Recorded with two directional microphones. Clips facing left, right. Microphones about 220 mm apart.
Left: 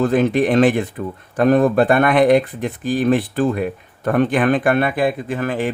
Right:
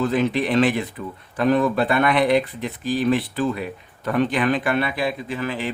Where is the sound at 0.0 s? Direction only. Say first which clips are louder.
Left 5 dB; 50° left (ahead or behind).